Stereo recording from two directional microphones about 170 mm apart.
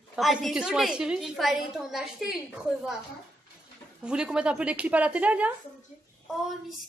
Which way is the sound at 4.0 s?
5° right (ahead or behind).